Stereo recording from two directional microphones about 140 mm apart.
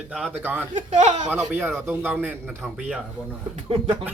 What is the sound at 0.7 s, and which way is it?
Speech, 60° right (ahead or behind).